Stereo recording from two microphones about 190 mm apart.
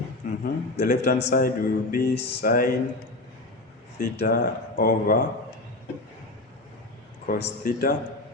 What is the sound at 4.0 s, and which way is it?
Speech, 50° left (ahead or behind).